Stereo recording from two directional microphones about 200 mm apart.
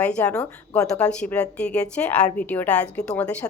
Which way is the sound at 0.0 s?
5° left (ahead or behind).